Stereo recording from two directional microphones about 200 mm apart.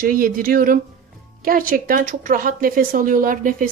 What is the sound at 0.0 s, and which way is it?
A woman's voice, 45° right (ahead or behind).